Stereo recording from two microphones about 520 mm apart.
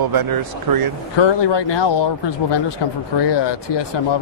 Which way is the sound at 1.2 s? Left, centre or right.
Left.